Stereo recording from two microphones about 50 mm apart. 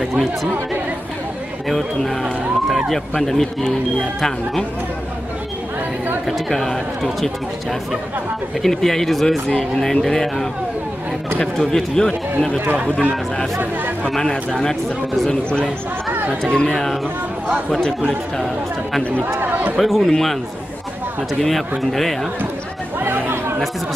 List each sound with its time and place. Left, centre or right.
0.0 s speech: centre
1.7 s speech: centre
2.2 s speech: centre
2.9 s speech: centre
6.2 s speech: centre
8.6 s a man's voice: centre
11.5 s a man's voice: centre
12.5 s speech: right
14.1 s a man's voice: centre
19.4 s a man's voice: right
19.8 s speech: centre
21.4 s speech: centre
22.9 s chatter: right